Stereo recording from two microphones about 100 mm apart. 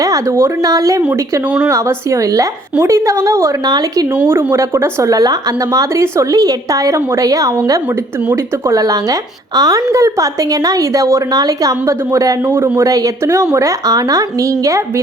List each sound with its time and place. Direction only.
0.0 s a woman's voice: 35° right (ahead or behind)
3.7 s a woman's voice: 40° right (ahead or behind)
4.5 s a woman's voice: 25° right (ahead or behind)